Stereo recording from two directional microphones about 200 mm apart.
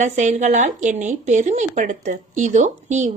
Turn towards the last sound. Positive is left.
turn(degrees=-35)  # may be behind; listen again after turning